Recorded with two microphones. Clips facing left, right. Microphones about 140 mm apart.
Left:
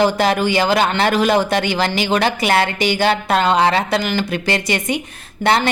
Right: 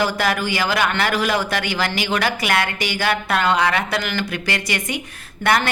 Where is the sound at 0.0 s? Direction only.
25° left (ahead or behind).